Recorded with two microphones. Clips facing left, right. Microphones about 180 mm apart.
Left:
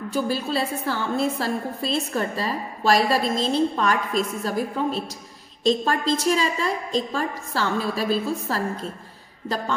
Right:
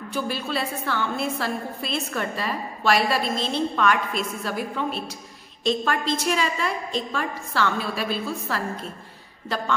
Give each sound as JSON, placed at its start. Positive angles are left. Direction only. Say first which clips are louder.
{"t": 0.1, "sound": "a woman's voice", "louder": "left 3 dB", "side_deg": 35}